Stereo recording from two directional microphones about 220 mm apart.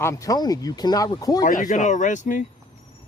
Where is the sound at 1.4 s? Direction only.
35° left (ahead or behind).